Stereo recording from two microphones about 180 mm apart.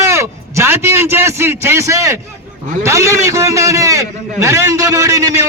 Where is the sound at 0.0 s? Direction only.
15° right (ahead or behind).